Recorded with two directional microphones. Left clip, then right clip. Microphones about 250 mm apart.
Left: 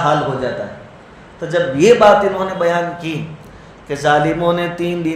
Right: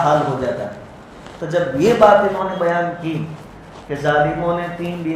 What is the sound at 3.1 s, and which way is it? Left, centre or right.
Speech, left.